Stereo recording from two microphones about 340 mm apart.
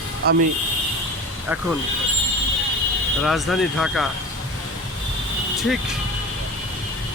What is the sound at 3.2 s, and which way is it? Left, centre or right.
Speech, centre.